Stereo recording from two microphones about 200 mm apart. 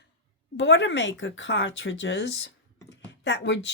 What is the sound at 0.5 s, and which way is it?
Speech, 65° left (ahead or behind).